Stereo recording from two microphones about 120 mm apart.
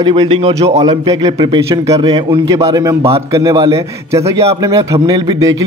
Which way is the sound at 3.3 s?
30° right (ahead or behind).